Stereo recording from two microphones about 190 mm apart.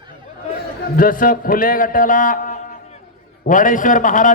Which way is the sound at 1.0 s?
45° left (ahead or behind).